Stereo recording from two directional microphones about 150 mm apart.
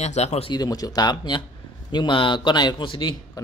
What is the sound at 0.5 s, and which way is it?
A man's voice, 25° left (ahead or behind).